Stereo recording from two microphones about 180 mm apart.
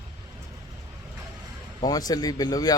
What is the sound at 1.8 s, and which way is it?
Speech, 20° left (ahead or behind).